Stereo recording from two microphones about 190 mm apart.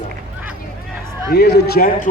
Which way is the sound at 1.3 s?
60° left (ahead or behind).